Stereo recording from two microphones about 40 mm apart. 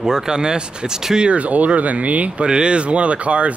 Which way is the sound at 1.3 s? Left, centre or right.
Right.